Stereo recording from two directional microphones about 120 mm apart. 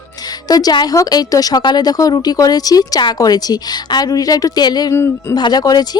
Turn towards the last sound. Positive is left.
turn(degrees=35)  # may be behind; listen again after turning